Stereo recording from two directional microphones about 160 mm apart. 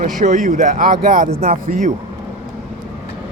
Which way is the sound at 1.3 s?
40° right (ahead or behind).